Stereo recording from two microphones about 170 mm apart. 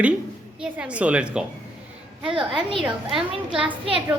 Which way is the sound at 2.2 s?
30° right (ahead or behind).